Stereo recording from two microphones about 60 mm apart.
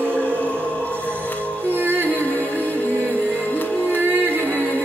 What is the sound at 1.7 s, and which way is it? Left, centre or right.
Music, right.